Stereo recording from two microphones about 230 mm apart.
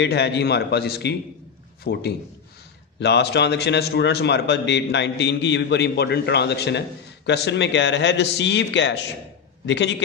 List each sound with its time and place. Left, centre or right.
0.0 s a man's voice: left